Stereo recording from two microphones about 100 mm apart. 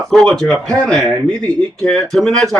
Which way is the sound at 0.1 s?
5° left (ahead or behind).